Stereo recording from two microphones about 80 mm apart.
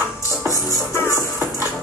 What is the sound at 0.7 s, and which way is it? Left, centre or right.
Music, left.